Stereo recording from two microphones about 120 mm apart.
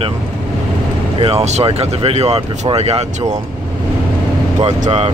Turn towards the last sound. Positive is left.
turn(degrees=-65)  # may be behind; listen again after turning